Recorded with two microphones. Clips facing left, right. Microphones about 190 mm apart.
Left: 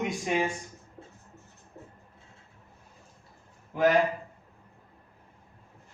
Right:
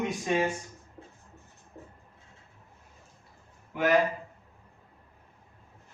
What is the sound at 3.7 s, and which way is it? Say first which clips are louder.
Speech: left 5 dB; 35° left (ahead or behind).